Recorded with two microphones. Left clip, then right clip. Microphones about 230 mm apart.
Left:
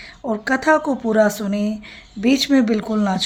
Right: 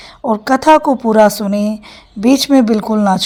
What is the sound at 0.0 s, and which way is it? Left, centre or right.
A woman's voice, right.